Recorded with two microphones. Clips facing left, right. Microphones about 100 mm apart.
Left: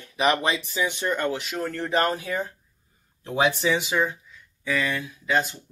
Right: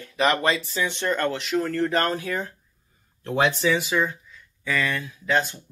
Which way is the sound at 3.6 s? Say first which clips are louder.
Right 1 dB; 20° left (ahead or behind).